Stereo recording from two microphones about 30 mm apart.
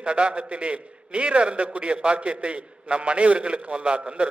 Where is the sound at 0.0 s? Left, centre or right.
Right.